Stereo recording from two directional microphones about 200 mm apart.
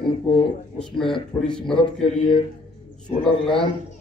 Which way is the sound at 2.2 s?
25° left (ahead or behind).